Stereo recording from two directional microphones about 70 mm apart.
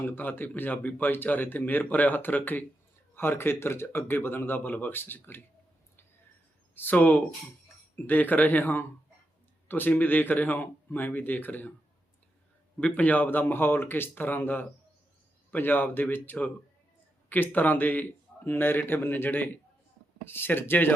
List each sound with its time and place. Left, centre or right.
0.1 s speech: left
6.7 s speech: left
12.9 s speech: left